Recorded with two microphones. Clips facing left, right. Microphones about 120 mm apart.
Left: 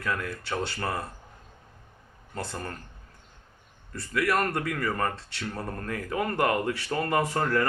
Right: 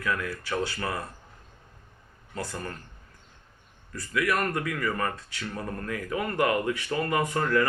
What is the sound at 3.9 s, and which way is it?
Speech, 30° left (ahead or behind).